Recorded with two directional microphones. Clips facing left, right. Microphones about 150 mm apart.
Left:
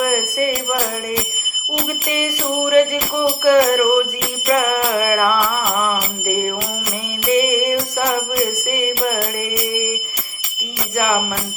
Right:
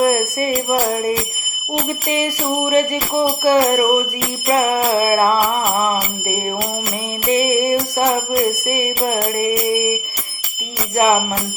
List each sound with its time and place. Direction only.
0.0 s bell: 30° right (ahead or behind)
2.1 s jingle bell: 30° right (ahead or behind)
3.4 s bell: 30° right (ahead or behind)
7.3 s jingle bell: 30° right (ahead or behind)
8.6 s bell: 30° right (ahead or behind)
10.9 s bell: 30° right (ahead or behind)